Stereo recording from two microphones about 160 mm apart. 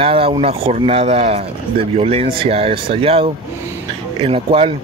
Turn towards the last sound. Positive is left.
turn(degrees=-35)  # may be behind; listen again after turning